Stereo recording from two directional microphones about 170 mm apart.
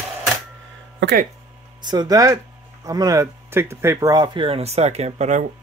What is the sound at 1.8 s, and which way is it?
Speech, 25° right (ahead or behind).